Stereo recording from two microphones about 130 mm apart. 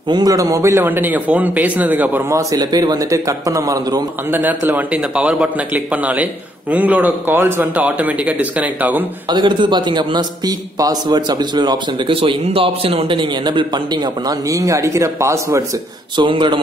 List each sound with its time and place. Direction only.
0.1 s a man's voice: 30° right (ahead or behind)
4.3 s a man's voice: 15° right (ahead or behind)
9.3 s a man's voice: 35° right (ahead or behind)
12.2 s a man's voice: 45° right (ahead or behind); by 15.6 s 20° right (ahead or behind)
16.2 s a man's voice: 40° right (ahead or behind)